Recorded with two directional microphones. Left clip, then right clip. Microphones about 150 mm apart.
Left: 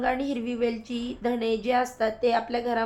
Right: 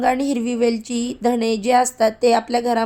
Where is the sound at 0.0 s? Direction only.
45° right (ahead or behind).